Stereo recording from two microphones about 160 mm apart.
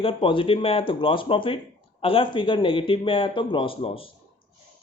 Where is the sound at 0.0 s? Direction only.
35° left (ahead or behind).